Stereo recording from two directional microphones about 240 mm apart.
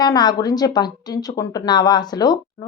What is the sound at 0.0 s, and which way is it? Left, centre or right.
Speech, centre.